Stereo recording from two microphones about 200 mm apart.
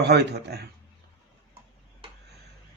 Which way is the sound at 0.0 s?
55° right (ahead or behind).